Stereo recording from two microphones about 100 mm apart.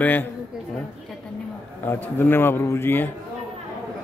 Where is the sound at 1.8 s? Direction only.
20° left (ahead or behind).